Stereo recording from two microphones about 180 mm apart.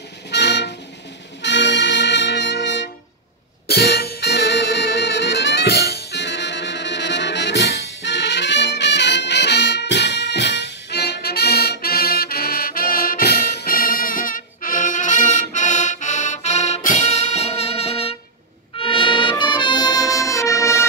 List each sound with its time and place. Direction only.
0.3 s music: 70° left (ahead or behind)
1.4 s brass instrument: 75° left (ahead or behind)
3.6 s music: 60° left (ahead or behind); by 20.8 s 15° left (ahead or behind)